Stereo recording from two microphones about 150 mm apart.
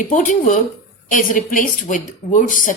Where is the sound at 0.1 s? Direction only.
60° left (ahead or behind).